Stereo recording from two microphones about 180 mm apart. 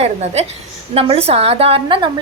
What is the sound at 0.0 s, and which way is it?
A woman's voice, 35° right (ahead or behind).